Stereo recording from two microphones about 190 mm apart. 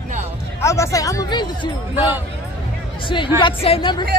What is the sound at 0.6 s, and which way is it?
A man's voice, 15° left (ahead or behind).